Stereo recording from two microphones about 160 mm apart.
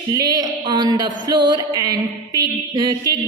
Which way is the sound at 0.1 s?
25° right (ahead or behind).